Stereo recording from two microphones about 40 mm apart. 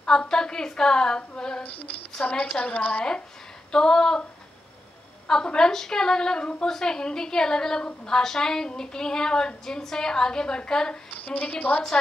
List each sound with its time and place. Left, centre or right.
0.0 s a woman's voice: centre
2.2 s a woman's voice: left
3.7 s a woman's voice: centre
5.3 s a woman's voice: centre
11.1 s a woman's voice: left